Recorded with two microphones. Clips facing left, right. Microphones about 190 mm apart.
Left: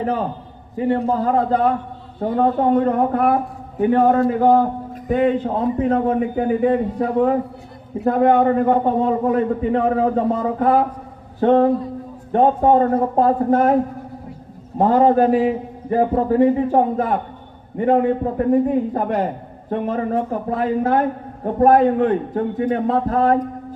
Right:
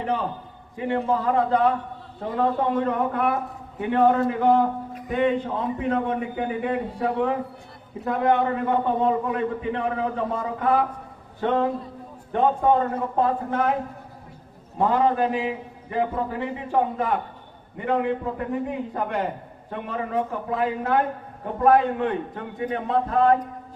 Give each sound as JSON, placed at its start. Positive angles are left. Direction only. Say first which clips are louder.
{"t": 0.8, "sound": "a man's voice", "louder": "left 5 dB", "side_deg": 40}
{"t": 8.0, "sound": "a man's voice", "louder": "left 7 dB", "side_deg": 40}
{"t": 14.8, "sound": "a man's voice", "louder": "left 7 dB", "side_deg": 40}